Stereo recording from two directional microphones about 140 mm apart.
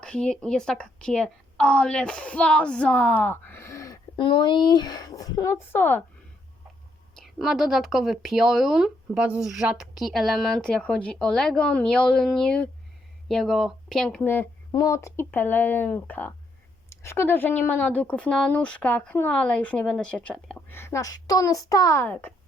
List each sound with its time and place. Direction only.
0.0 s a woman's voice: 5° left (ahead or behind); by 4.0 s 20° left (ahead or behind)
4.2 s speech: 35° left (ahead or behind); by 6.0 s 15° left (ahead or behind)
7.2 s speech: centre (ahead or behind)
14.7 s a woman's voice: 25° left (ahead or behind); by 20.7 s 10° left (ahead or behind)
20.7 s a child's voice: 20° left (ahead or behind)